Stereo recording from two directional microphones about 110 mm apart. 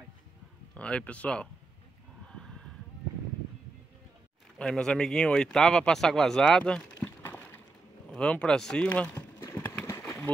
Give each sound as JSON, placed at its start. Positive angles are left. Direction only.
{"t": 0.7, "sound": "speech", "side_deg": 10}
{"t": 2.2, "sound": "horse", "side_deg": 5}
{"t": 4.6, "sound": "speech", "side_deg": 10}
{"t": 7.0, "sound": "a sound", "side_deg": 20}